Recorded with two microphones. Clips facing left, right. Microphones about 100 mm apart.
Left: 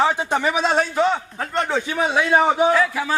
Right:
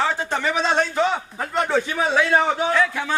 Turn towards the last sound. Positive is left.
turn(degrees=5)  # may be behind; listen again after turning